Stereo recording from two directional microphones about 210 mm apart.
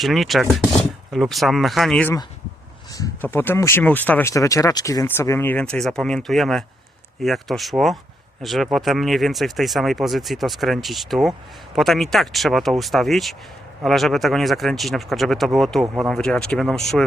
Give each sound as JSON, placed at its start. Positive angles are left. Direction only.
{"t": 0.0, "sound": "speech", "side_deg": 0}
{"t": 2.9, "sound": "a sound", "side_deg": 15}
{"t": 3.3, "sound": "speech", "side_deg": 10}